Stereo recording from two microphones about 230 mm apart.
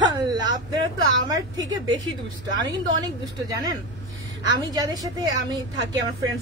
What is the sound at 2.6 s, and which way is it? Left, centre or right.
A woman's voice, centre.